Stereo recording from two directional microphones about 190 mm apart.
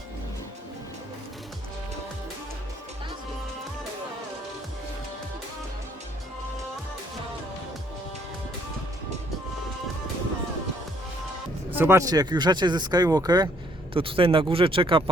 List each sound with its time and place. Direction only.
11.7 s speech: 10° right (ahead or behind)